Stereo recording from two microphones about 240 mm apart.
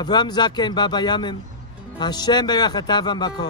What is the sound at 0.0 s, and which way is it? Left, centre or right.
A man's voice, centre.